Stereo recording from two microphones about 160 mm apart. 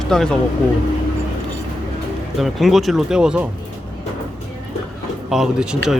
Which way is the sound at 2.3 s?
Centre (ahead or behind).